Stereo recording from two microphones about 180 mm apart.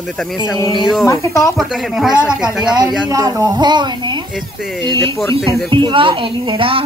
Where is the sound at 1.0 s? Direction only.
20° left (ahead or behind).